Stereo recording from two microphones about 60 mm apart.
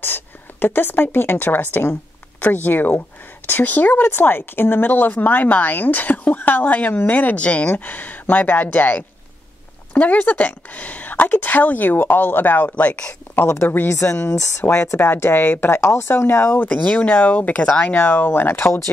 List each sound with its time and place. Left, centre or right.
0.0 s a woman's voice: left
13.9 s a woman's voice: left
16.5 s a woman's voice: left